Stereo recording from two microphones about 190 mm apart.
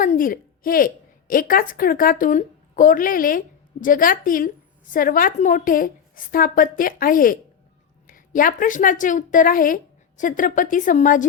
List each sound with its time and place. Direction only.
0.0 s a woman's voice: 45° left (ahead or behind)